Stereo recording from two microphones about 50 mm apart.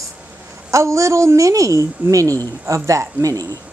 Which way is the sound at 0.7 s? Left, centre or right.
Right.